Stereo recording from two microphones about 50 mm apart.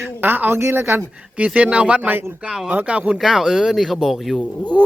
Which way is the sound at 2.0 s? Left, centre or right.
Right.